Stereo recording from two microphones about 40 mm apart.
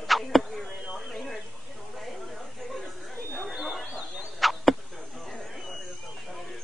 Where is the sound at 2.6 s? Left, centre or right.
Centre.